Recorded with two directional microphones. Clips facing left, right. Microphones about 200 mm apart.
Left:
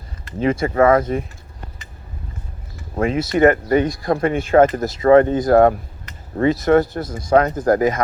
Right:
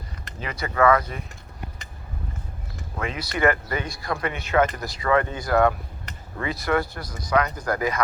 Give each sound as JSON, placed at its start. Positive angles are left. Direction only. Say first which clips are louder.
{"t": 0.7, "sound": "speech", "louder": "left 3 dB", "side_deg": 25}
{"t": 0.9, "sound": "speech", "louder": "left 9 dB", "side_deg": 45}
{"t": 2.9, "sound": "speech", "louder": "left 11 dB", "side_deg": 45}
{"t": 7.0, "sound": "speech", "louder": "left 10 dB", "side_deg": 25}
{"t": 7.3, "sound": "speech", "louder": "left 9 dB", "side_deg": 45}